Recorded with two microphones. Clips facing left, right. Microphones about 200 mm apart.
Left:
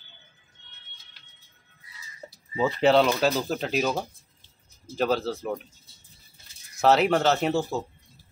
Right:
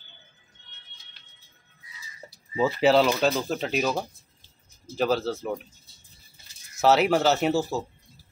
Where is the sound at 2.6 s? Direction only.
5° right (ahead or behind).